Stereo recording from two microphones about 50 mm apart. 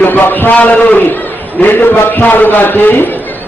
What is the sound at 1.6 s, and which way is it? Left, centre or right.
Speech, left.